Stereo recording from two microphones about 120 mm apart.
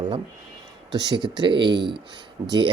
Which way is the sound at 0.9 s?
40° right (ahead or behind).